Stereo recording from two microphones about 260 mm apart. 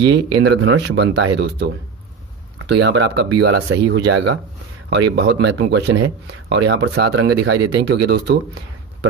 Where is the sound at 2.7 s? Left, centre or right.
Right.